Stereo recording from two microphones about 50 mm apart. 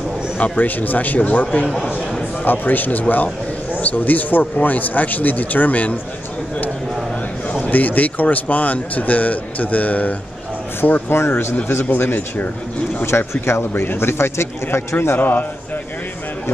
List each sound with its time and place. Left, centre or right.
0.4 s speech: left
2.4 s speech: left
7.5 s speech: left
10.8 s speech: left
13.0 s a man's voice: left
13.6 s a man's voice: left
15.1 s speech: left